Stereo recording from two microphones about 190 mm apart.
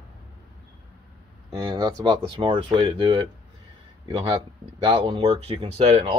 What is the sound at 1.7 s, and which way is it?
Speech, 20° right (ahead or behind).